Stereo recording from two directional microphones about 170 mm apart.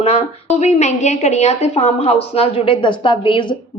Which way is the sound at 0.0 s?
40° left (ahead or behind).